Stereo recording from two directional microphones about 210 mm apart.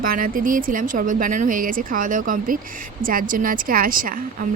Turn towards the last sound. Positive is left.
turn(degrees=-40)  # may be behind; listen again after turning